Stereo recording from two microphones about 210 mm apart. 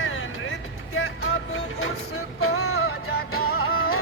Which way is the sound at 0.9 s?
85° left.